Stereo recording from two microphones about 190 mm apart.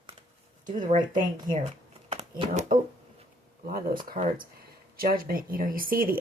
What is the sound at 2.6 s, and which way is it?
Speech, 40° right (ahead or behind).